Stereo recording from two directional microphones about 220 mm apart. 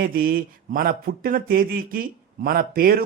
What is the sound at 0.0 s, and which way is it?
Speech, 40° right (ahead or behind).